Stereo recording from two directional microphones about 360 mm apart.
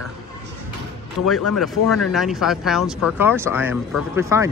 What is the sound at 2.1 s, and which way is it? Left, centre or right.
Speech, centre.